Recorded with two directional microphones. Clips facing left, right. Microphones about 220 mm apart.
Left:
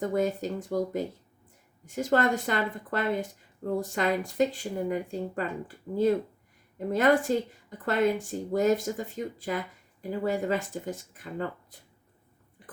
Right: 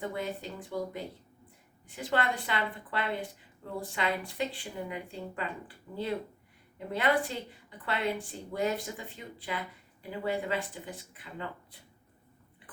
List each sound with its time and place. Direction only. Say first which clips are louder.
0.0 s speech: left 8 dB; 45° left (ahead or behind)
12.6 s chewing: left 6 dB; 45° left (ahead or behind)